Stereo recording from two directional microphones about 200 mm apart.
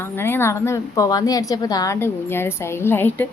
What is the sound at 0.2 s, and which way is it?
A woman's voice, 10° left (ahead or behind).